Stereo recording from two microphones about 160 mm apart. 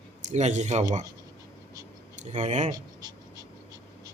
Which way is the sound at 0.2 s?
50° right (ahead or behind).